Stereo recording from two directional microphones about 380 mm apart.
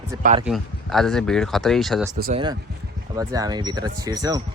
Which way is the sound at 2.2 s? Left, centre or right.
Centre.